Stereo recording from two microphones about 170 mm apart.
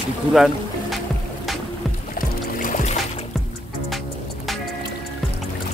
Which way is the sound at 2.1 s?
50° left (ahead or behind).